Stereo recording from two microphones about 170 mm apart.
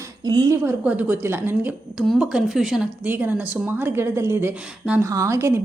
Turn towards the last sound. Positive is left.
turn(degrees=-15)  # may be behind; listen again after turning